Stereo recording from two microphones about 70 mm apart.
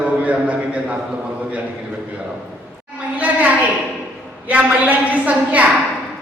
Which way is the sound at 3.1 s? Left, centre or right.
Right.